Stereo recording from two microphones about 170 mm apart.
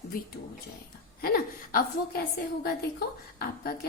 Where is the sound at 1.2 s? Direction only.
60° left (ahead or behind).